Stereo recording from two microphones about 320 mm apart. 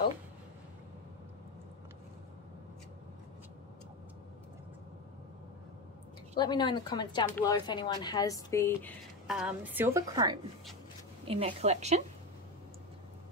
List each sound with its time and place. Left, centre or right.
6.3 s a woman's voice: centre; by 12.0 s right